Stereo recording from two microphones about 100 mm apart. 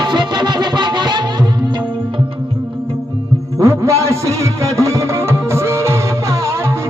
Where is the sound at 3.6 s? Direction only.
30° right (ahead or behind).